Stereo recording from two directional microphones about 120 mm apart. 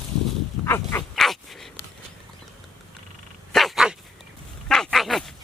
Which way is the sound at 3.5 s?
Centre (ahead or behind).